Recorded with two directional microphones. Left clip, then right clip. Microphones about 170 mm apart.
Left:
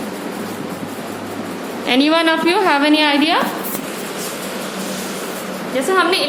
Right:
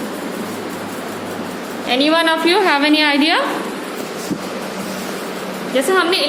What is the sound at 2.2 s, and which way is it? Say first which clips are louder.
Speech: right 1 dB; 10° left (ahead or behind).